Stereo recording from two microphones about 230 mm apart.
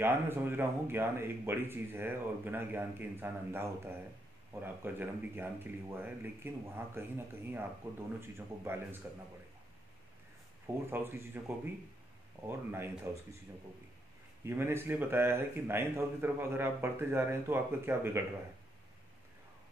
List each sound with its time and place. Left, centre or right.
0.0 s speech: centre
10.9 s speech: centre
14.4 s speech: centre